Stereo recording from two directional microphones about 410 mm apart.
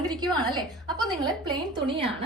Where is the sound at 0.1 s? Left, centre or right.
Centre.